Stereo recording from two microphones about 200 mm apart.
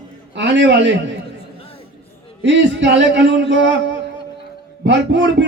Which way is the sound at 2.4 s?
65° right (ahead or behind).